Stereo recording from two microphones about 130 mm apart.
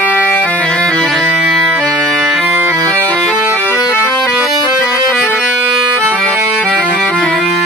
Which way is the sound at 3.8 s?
5° right (ahead or behind).